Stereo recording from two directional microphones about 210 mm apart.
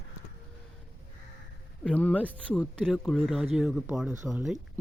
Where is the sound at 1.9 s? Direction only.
5° left (ahead or behind).